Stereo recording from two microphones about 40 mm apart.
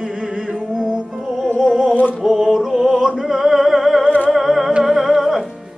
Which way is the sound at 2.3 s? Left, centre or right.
Centre.